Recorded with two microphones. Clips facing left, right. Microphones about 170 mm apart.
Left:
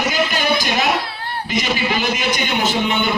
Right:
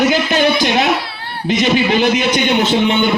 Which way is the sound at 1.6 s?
55° right (ahead or behind).